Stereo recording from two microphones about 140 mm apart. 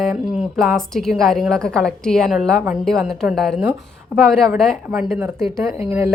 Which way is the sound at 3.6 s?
15° right (ahead or behind).